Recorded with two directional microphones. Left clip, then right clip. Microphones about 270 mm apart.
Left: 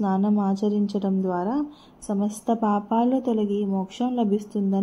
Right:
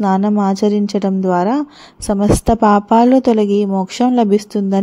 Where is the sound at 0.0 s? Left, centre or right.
Right.